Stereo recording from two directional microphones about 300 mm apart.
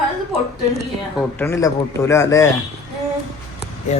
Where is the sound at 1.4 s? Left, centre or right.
Centre.